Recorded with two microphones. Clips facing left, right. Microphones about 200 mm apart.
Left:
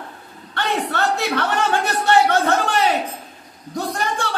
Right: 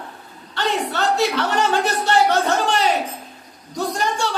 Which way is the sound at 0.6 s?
55° left (ahead or behind).